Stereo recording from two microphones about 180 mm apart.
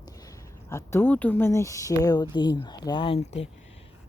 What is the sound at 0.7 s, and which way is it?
Speech, 15° left (ahead or behind).